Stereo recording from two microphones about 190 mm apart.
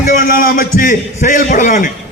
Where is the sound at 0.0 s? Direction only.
50° left (ahead or behind).